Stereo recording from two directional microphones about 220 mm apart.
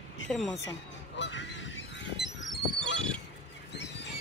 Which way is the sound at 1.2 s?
55° left (ahead or behind).